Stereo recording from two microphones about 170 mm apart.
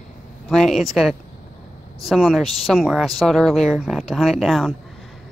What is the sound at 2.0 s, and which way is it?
Speech, centre (ahead or behind).